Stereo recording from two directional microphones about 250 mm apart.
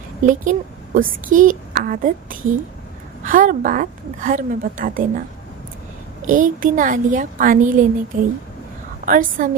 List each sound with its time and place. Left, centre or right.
0.9 s a woman's voice: right
6.2 s a woman's voice: right